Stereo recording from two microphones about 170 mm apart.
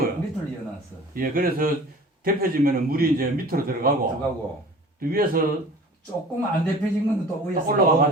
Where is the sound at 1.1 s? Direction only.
55° right (ahead or behind).